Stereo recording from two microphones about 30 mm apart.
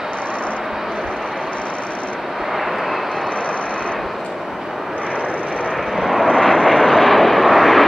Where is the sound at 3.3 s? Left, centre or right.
Left.